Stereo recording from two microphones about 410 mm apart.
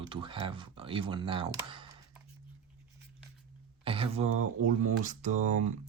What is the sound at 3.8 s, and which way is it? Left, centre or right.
Speech, centre.